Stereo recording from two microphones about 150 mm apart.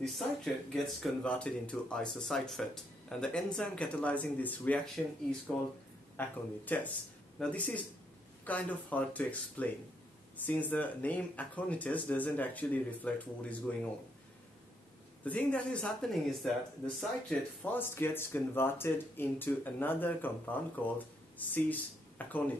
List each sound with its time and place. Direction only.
0.0 s speech: centre (ahead or behind)
15.2 s speech: 10° left (ahead or behind)